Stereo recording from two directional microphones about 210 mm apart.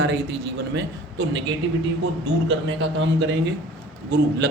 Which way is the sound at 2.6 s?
65° right (ahead or behind).